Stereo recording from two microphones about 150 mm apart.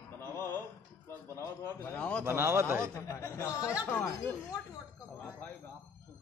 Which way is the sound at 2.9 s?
20° left (ahead or behind).